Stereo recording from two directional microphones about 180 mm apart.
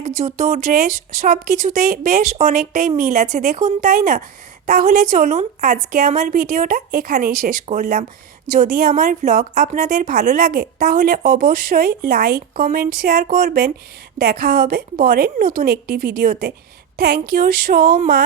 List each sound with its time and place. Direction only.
0.2 s a woman's voice: 40° right (ahead or behind)